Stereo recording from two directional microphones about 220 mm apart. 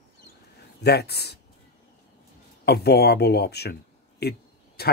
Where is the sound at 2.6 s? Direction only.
45° left (ahead or behind).